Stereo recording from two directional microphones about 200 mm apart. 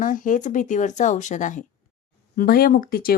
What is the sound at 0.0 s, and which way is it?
Speech, 40° left (ahead or behind).